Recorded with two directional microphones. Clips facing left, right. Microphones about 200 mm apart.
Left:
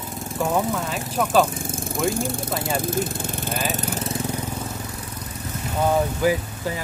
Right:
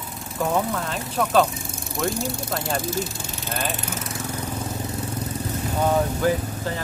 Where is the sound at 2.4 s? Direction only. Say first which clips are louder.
Left 1 dB; centre (ahead or behind).